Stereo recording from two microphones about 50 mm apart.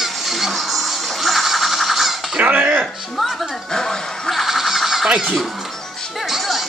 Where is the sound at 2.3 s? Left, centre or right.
Right.